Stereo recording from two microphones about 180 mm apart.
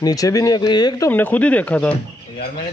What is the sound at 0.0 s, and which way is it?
Speech, 20° left (ahead or behind).